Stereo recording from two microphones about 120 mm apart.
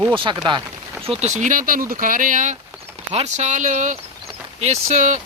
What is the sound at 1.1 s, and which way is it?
Speech, 70° right (ahead or behind).